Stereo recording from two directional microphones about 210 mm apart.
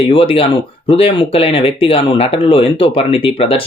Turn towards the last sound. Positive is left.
turn(degrees=25)  # may be behind; listen again after turning